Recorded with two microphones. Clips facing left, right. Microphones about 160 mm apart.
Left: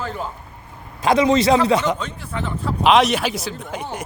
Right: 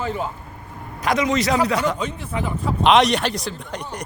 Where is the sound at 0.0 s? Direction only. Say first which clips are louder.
Right 2 dB; 5° right (ahead or behind).